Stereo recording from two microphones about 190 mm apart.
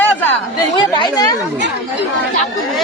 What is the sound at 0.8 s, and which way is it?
Speech, 25° left (ahead or behind).